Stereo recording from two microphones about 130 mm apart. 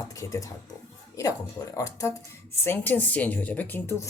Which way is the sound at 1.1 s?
25° left (ahead or behind).